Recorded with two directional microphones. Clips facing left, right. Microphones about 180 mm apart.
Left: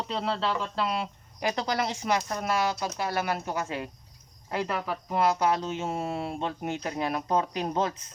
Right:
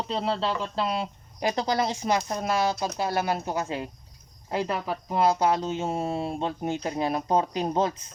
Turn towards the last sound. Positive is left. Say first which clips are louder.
# right 3 dB
turn(degrees=-35)  # may be behind; listen again after turning